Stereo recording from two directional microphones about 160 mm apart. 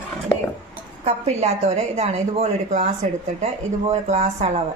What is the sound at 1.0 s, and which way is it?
A woman's voice, 40° right (ahead or behind).